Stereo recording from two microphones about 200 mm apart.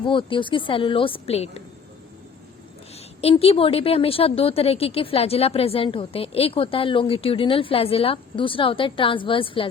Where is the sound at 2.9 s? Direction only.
30° left (ahead or behind).